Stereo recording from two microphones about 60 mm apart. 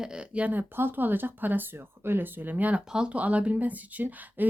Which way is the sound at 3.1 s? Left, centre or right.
Right.